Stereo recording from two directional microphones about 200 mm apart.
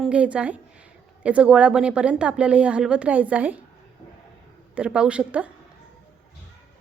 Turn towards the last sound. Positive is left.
turn(degrees=-5)  # may be behind; listen again after turning